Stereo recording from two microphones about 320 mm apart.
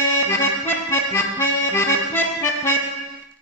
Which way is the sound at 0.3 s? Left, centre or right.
Centre.